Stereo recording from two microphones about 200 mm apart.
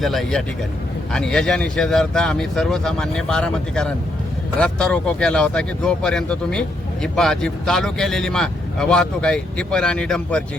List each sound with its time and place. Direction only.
0.0 s speech: centre (ahead or behind)